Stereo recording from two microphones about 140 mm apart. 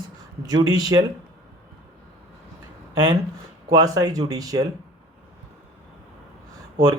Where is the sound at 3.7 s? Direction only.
25° right (ahead or behind).